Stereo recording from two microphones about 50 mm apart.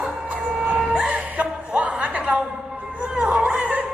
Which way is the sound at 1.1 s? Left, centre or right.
Right.